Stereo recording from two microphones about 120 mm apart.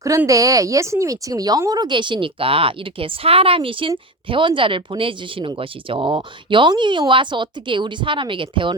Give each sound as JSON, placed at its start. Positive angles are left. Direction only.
{"t": 0.3, "sound": "speech", "side_deg": -30}